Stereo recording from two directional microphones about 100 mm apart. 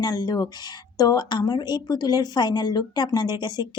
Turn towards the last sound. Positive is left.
turn(degrees=45)  # may be behind; listen again after turning